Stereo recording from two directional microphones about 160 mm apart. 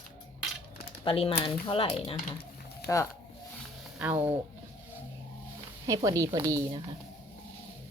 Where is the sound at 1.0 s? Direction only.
35° left (ahead or behind).